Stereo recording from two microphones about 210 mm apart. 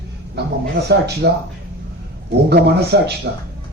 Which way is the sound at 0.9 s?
50° right (ahead or behind).